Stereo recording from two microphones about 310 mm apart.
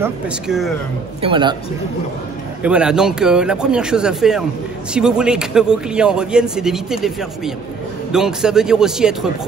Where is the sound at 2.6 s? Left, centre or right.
Centre.